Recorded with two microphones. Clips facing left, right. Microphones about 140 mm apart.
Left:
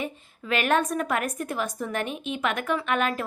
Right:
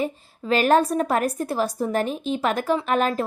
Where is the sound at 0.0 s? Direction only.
35° right (ahead or behind).